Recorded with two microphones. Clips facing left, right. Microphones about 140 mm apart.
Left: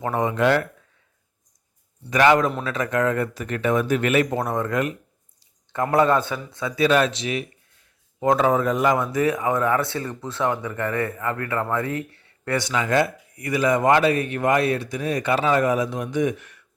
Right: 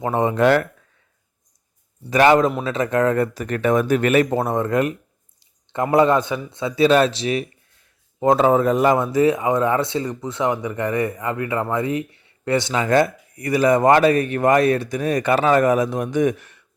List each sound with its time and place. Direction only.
0.0 s speech: 25° right (ahead or behind)
2.0 s speech: 30° right (ahead or behind)
4.3 s speech: 25° right (ahead or behind); by 16.5 s 50° right (ahead or behind)